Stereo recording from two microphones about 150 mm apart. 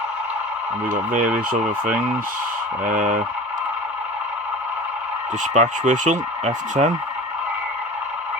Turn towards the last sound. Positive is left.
turn(degrees=-50)  # may be behind; listen again after turning